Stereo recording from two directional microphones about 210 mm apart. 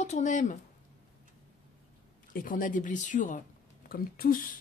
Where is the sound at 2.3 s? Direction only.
40° left (ahead or behind).